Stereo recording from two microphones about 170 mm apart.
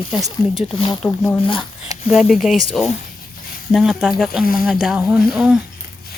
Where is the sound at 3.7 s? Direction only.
Centre (ahead or behind).